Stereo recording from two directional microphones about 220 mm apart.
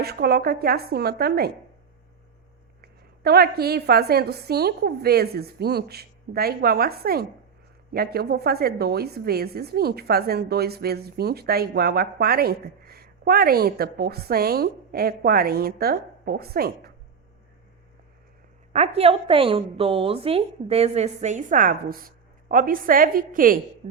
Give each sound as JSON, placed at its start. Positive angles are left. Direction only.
{"t": 0.0, "sound": "a woman's voice", "side_deg": -45}
{"t": 2.8, "sound": "a woman's voice", "side_deg": -45}
{"t": 18.7, "sound": "a woman's voice", "side_deg": -30}
{"t": 23.8, "sound": "music", "side_deg": -35}